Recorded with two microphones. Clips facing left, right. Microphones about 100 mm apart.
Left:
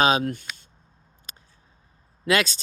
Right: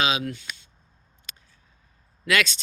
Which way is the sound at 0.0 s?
45° left (ahead or behind).